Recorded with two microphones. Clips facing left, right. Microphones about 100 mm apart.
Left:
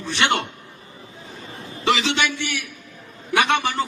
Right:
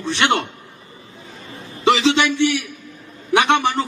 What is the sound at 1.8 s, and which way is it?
A man's voice, 25° right (ahead or behind).